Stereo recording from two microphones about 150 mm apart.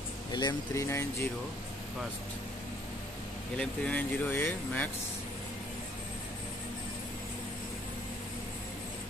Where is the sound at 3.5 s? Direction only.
10° left (ahead or behind).